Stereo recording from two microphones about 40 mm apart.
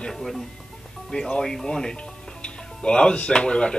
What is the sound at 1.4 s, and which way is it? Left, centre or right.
Speech, centre.